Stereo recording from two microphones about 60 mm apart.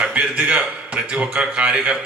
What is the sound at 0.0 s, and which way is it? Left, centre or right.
A man's voice, right.